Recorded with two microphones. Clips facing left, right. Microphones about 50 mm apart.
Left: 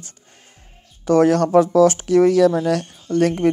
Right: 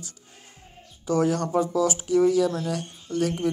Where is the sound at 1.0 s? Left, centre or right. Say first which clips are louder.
Left 9 dB; left.